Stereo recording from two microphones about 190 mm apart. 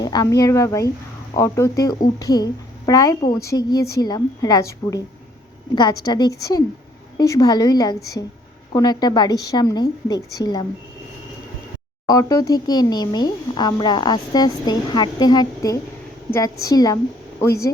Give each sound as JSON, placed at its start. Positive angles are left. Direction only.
{"t": 0.0, "sound": "speech", "side_deg": 20}
{"t": 12.0, "sound": "speech", "side_deg": 20}